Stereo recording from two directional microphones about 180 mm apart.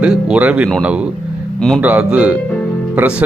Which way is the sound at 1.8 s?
5° right (ahead or behind).